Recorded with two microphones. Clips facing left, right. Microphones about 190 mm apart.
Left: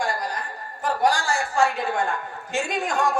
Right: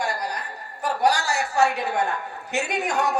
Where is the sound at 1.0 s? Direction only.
20° right (ahead or behind).